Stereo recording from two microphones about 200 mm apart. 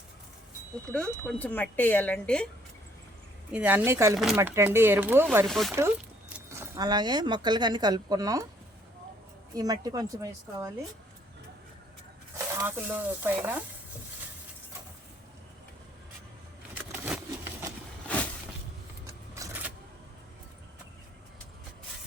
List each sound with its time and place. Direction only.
0.9 s speech: 5° left (ahead or behind)
3.5 s speech: 10° right (ahead or behind)
5.5 s speech: centre (ahead or behind)
6.3 s speech: 15° right (ahead or behind)
9.6 s speech: 20° right (ahead or behind)
12.5 s speech: 10° right (ahead or behind)
16.9 s a sound: 10° right (ahead or behind)
18.1 s a sound: 5° left (ahead or behind)
19.0 s keys jangling: 15° right (ahead or behind)